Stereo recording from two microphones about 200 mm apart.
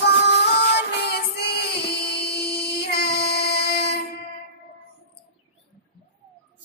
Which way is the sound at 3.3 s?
55° left (ahead or behind).